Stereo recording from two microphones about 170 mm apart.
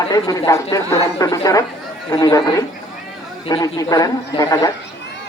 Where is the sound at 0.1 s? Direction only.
20° left (ahead or behind).